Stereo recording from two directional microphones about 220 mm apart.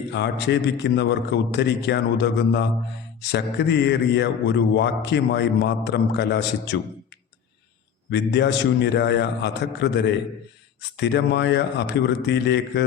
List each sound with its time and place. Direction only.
0.1 s speech: 50° left (ahead or behind)
8.1 s speech: 50° left (ahead or behind)